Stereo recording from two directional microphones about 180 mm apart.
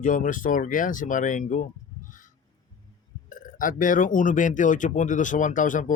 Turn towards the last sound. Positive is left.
turn(degrees=45)  # may be behind; listen again after turning